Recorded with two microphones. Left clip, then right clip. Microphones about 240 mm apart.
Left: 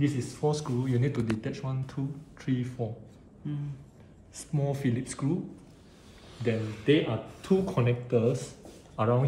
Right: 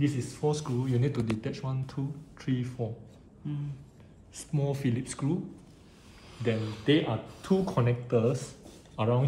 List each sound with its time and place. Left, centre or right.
0.0 s speech: centre
3.4 s speech: centre
4.4 s speech: centre
6.6 s speech: centre
6.9 s speech: centre